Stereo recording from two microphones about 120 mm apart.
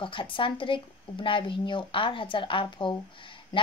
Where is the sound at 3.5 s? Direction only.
40° left (ahead or behind).